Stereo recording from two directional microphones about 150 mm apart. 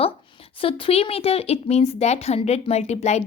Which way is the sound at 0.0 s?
35° left (ahead or behind).